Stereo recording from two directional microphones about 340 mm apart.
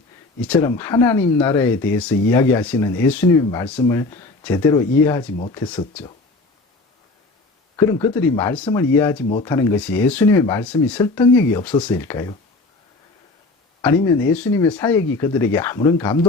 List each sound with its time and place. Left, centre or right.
0.4 s speech: centre
7.8 s speech: centre
14.3 s speech: centre